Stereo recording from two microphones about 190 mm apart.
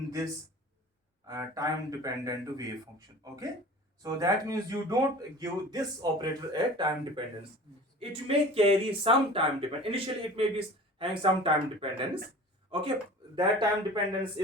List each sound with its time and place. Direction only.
1.3 s speech: 20° right (ahead or behind)